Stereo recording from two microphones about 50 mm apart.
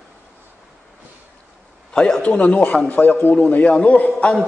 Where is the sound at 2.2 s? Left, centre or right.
Left.